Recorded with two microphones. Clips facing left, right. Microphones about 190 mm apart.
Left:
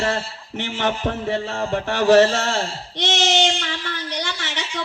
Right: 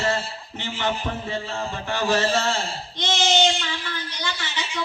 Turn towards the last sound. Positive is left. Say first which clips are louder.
# left 3 dB
turn(degrees=75)  # may be behind; listen again after turning